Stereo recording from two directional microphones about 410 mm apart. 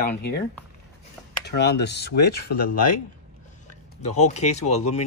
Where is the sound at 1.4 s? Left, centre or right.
Left.